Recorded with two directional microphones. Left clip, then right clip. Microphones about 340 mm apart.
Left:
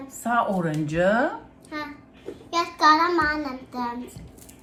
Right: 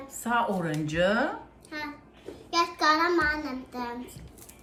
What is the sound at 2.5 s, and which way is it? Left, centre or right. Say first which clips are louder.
Child singing: left 5 dB; centre.